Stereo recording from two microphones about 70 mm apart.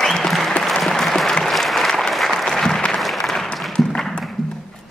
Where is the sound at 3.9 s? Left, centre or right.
Centre.